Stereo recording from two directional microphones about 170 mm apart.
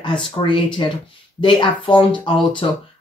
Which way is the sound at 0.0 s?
30° left (ahead or behind).